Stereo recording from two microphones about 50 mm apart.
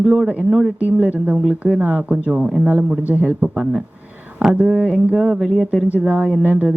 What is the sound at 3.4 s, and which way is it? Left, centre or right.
Speech, centre.